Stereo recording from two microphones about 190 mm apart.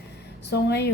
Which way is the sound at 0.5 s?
60° left (ahead or behind).